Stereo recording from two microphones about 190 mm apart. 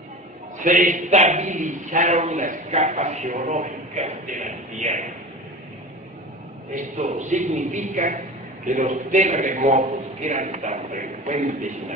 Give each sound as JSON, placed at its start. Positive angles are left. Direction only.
{"t": 0.6, "sound": "a man's voice", "side_deg": -40}
{"t": 6.7, "sound": "a man's voice", "side_deg": -40}